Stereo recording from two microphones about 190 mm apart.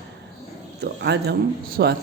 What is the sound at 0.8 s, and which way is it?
Speech, 60° right (ahead or behind).